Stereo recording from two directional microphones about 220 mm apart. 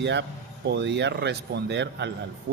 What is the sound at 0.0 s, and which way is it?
Speech, 50° right (ahead or behind).